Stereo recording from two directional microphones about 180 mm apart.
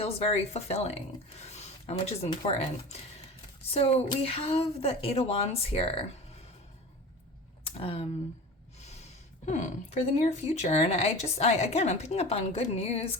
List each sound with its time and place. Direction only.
0.0 s a woman's voice: 35° left (ahead or behind)
7.6 s speech: 30° left (ahead or behind)
9.5 s a woman's voice: 40° left (ahead or behind)